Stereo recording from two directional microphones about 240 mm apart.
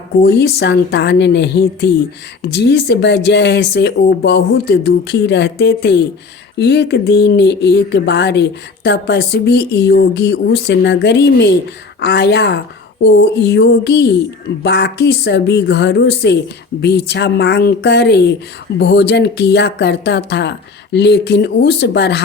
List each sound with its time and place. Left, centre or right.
0.2 s speech: left